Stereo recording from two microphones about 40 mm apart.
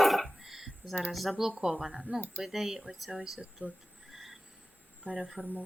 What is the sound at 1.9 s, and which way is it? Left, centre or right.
Speech, right.